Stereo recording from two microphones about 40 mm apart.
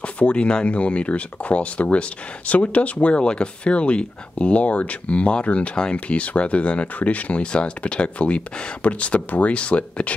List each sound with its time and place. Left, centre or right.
0.0 s speech: left